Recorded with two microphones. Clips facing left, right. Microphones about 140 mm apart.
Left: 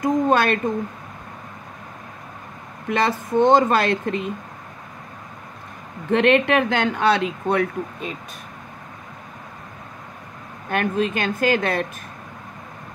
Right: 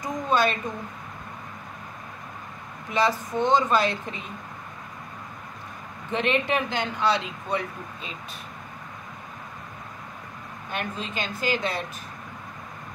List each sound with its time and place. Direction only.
0.0 s speech: 55° left (ahead or behind)
2.9 s speech: 55° left (ahead or behind)
6.1 s speech: 65° left (ahead or behind)
10.7 s speech: 55° left (ahead or behind)